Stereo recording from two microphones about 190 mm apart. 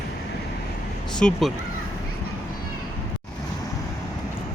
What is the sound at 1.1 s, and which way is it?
Speech, centre (ahead or behind).